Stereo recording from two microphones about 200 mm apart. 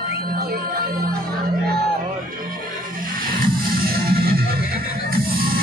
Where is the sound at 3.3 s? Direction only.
45° right (ahead or behind).